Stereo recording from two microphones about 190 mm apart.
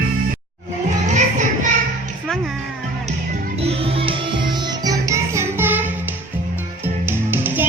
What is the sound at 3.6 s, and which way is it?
Music, 30° right (ahead or behind).